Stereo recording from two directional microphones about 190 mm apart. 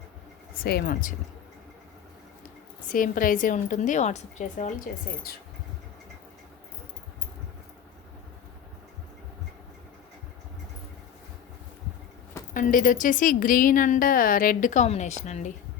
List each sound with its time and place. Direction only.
0.5 s a woman's voice: 55° left (ahead or behind)
2.9 s a woman's voice: 45° left (ahead or behind)
12.5 s a woman's voice: 45° left (ahead or behind)